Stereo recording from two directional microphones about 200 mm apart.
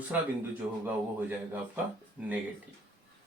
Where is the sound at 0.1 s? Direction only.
5° right (ahead or behind).